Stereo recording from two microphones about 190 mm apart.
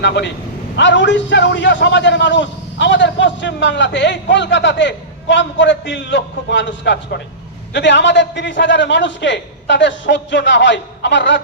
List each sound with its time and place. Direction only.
0.0 s a man's voice: 65° left (ahead or behind)